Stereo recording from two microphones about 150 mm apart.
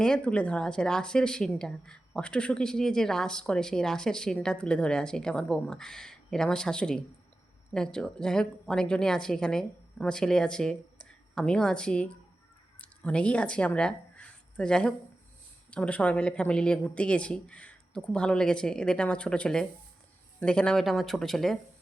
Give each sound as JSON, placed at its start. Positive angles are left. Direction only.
{"t": 0.0, "sound": "speech", "side_deg": 5}